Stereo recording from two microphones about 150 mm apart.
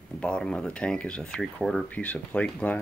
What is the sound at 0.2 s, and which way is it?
Speech, 5° left (ahead or behind).